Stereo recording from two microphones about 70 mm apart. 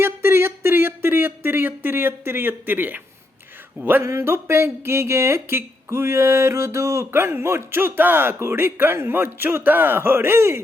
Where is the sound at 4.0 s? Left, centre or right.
Right.